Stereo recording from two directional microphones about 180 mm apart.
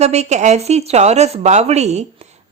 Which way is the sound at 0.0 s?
40° right (ahead or behind).